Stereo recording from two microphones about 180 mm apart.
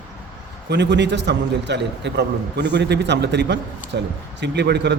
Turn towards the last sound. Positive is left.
turn(degrees=-70)  # may be behind; listen again after turning